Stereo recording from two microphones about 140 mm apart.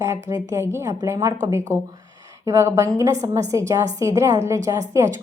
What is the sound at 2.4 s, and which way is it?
A woman's voice, 20° right (ahead or behind).